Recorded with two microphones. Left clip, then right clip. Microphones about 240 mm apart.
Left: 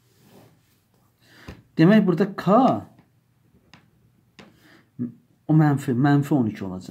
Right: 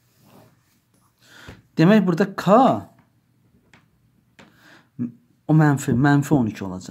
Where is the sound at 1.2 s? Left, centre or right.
Right.